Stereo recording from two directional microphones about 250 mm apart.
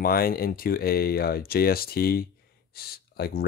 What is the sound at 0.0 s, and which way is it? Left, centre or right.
Speech, left.